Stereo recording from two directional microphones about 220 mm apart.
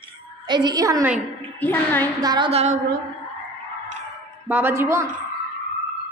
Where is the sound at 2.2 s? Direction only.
20° right (ahead or behind).